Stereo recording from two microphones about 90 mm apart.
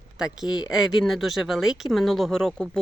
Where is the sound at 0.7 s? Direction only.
5° right (ahead or behind).